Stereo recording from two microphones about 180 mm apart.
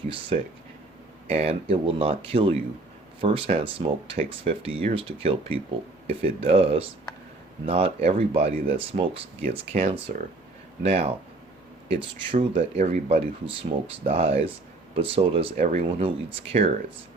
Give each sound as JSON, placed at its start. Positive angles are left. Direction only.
{"t": 1.3, "sound": "speech", "side_deg": -35}
{"t": 12.7, "sound": "speech", "side_deg": -40}